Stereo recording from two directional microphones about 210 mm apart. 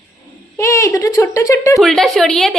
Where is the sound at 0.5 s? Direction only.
15° left (ahead or behind).